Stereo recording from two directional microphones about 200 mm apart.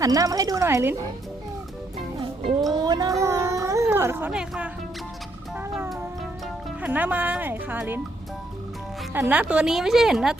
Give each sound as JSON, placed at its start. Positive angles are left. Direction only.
{"t": 0.0, "sound": "speech", "side_deg": -15}
{"t": 2.7, "sound": "music", "side_deg": -20}
{"t": 3.8, "sound": "speech", "side_deg": -10}
{"t": 5.5, "sound": "music", "side_deg": -5}
{"t": 6.8, "sound": "speech", "side_deg": -10}
{"t": 9.1, "sound": "a woman's voice", "side_deg": -10}